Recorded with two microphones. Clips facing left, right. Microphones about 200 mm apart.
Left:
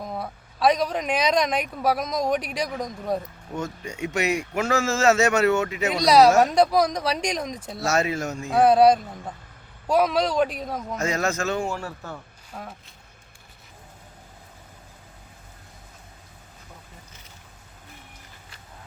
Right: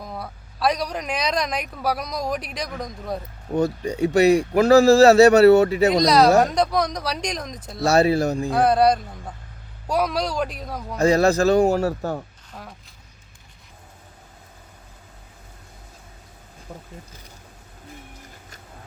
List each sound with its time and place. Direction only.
0.0 s a man's voice: 5° left (ahead or behind)
3.5 s speech: 35° right (ahead or behind)
6.4 s speech: 5° left (ahead or behind)
7.9 s speech: 35° right (ahead or behind)
8.4 s speech: 5° left (ahead or behind)
10.9 s speech: 35° right (ahead or behind)
12.5 s speech: 5° left (ahead or behind)